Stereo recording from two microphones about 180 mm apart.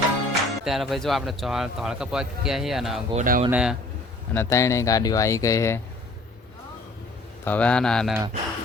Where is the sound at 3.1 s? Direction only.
45° right (ahead or behind).